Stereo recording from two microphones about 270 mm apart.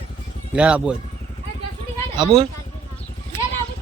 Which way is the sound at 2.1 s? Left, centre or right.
Centre.